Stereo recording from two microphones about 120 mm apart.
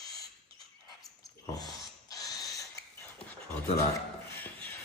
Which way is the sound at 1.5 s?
35° left (ahead or behind).